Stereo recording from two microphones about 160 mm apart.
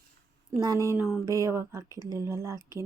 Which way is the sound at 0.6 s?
20° right (ahead or behind).